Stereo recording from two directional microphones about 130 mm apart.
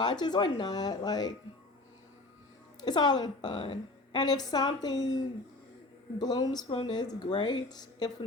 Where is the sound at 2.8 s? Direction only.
35° left (ahead or behind).